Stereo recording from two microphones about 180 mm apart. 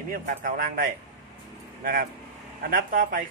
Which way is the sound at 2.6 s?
50° right (ahead or behind).